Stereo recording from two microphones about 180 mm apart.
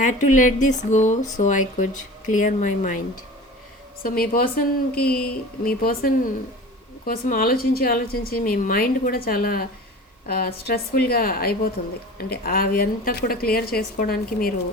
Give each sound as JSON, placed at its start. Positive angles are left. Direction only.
{"t": 0.0, "sound": "speech", "side_deg": 45}
{"t": 4.0, "sound": "a woman's voice", "side_deg": 55}